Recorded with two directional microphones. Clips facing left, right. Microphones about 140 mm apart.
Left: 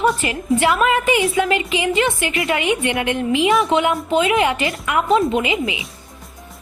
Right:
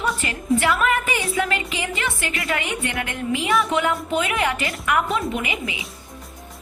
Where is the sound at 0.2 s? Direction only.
20° left (ahead or behind).